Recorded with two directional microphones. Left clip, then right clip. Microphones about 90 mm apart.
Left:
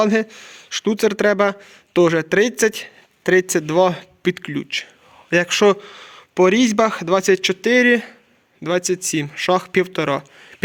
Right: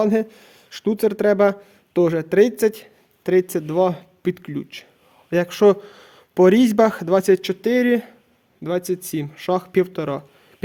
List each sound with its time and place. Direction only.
0.0 s speech: 10° right (ahead or behind)
5.6 s speech: 35° right (ahead or behind); by 10.2 s 5° left (ahead or behind)